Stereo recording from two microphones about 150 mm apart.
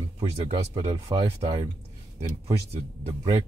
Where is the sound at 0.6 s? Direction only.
35° right (ahead or behind).